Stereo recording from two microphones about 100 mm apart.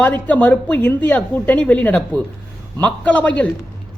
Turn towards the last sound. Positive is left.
turn(degrees=15)  # may be behind; listen again after turning